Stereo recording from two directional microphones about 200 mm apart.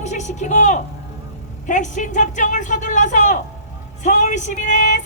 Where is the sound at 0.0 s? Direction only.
35° left (ahead or behind).